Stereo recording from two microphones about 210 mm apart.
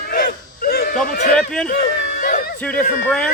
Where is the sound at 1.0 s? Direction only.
45° left (ahead or behind).